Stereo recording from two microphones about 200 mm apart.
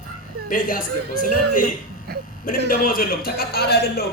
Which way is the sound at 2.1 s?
50° right (ahead or behind).